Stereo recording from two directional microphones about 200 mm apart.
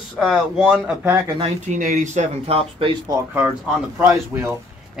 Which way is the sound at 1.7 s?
40° right (ahead or behind).